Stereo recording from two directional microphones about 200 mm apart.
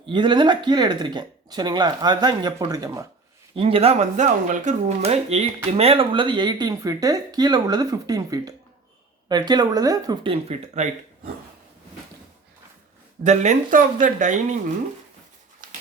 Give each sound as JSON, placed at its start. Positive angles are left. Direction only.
{"t": 0.1, "sound": "speech", "side_deg": -25}
{"t": 3.5, "sound": "speech", "side_deg": -30}
{"t": 13.2, "sound": "speech", "side_deg": -35}
{"t": 15.6, "sound": "a sound", "side_deg": -40}